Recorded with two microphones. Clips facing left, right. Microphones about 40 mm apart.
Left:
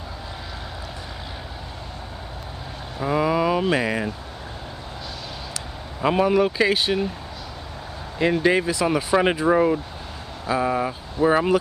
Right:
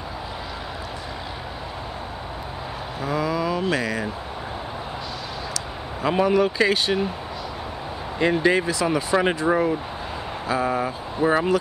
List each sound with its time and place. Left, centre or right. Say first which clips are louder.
3.0 s vehicle: left 4 dB; centre
3.7 s speech: left 2 dB; centre
6.1 s speech: even; centre
8.2 s speech: even; centre